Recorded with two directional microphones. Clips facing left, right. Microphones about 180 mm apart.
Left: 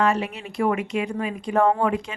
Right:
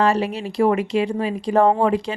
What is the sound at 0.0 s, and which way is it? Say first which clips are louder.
A woman's voice: right 3 dB; 35° right (ahead or behind).